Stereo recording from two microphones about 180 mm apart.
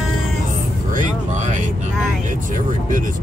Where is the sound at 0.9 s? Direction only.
45° right (ahead or behind).